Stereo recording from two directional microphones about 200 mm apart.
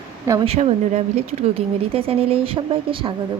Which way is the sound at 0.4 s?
30° right (ahead or behind).